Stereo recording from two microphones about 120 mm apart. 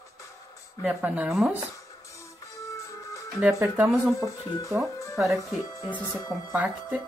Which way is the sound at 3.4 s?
15° right (ahead or behind).